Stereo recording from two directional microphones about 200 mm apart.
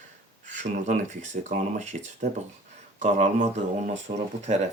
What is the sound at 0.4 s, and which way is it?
Speech, 35° right (ahead or behind).